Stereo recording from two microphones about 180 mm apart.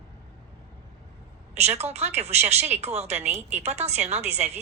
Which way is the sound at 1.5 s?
35° right (ahead or behind).